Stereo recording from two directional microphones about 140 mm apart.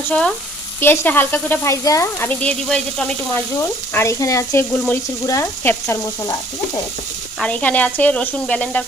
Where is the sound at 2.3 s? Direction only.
10° left (ahead or behind).